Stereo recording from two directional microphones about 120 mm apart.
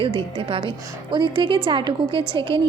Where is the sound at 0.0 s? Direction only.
50° right (ahead or behind).